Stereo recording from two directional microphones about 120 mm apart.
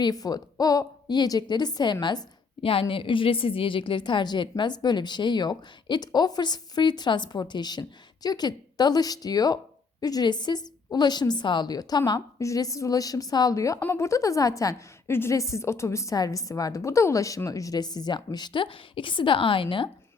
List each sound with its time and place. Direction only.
0.0 s a woman's voice: 35° left (ahead or behind)